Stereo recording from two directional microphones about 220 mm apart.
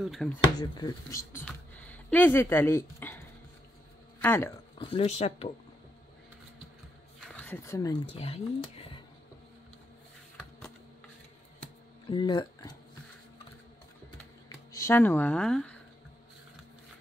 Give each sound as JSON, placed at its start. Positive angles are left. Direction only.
{"t": 0.0, "sound": "speech", "side_deg": 0}
{"t": 0.4, "sound": "speech", "side_deg": 20}
{"t": 4.2, "sound": "speech", "side_deg": 10}
{"t": 4.7, "sound": "speech", "side_deg": 25}
{"t": 7.3, "sound": "speech", "side_deg": 10}
{"t": 12.1, "sound": "speech", "side_deg": 20}
{"t": 14.7, "sound": "speech", "side_deg": 15}